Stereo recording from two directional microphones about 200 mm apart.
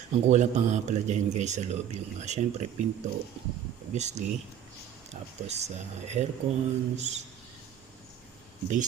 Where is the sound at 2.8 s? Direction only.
35° right (ahead or behind).